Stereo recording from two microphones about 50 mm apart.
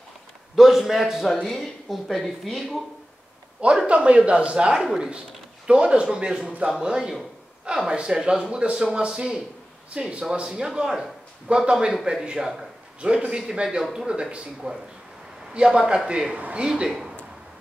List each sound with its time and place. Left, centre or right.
0.6 s speech: centre
1.2 s speech: centre
3.8 s speech: right
13.0 s speech: right
13.4 s a man's voice: centre
16.3 s speech: right